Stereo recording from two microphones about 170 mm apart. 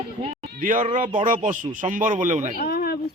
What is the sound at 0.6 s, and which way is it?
Speech, 50° right (ahead or behind).